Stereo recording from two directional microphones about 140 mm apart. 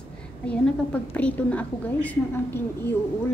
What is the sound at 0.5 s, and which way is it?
A woman's voice, 10° left (ahead or behind).